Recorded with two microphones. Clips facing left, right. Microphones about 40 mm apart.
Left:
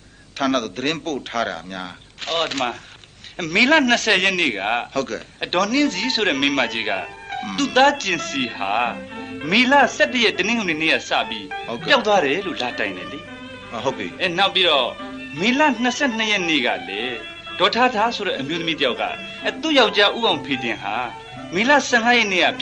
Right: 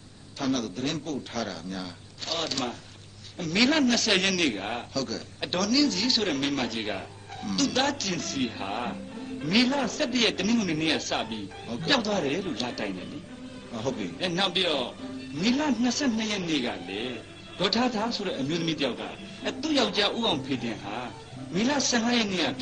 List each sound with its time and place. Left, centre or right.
0.4 s a man's voice: left